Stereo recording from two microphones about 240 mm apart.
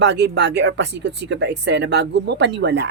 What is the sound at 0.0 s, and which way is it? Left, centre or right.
Speech, right.